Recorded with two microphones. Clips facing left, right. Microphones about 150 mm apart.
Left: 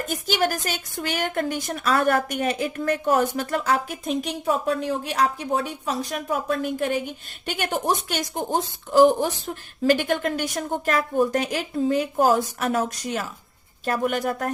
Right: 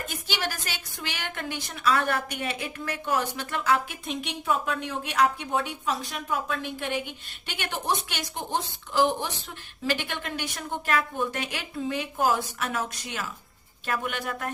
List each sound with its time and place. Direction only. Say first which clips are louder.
0.1 s a woman's voice: left 11 dB; 45° left (ahead or behind)